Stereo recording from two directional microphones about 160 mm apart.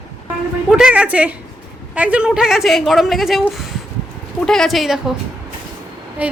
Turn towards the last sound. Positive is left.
turn(degrees=-10)  # may be behind; listen again after turning